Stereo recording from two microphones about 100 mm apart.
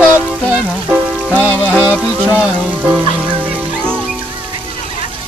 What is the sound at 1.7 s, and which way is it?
Music, 10° right (ahead or behind).